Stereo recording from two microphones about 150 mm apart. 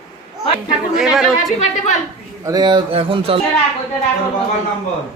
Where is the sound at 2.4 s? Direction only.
25° right (ahead or behind).